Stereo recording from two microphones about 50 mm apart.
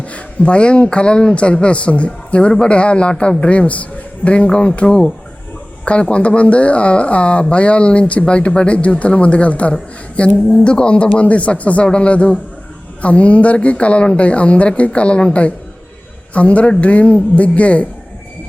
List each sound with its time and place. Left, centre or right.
0.0 s speech: left